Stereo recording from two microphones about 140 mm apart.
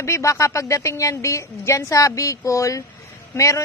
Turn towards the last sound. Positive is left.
turn(degrees=20)  # may be behind; listen again after turning